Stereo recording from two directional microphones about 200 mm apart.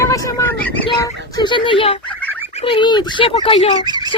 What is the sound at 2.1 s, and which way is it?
Fowl, 10° left (ahead or behind).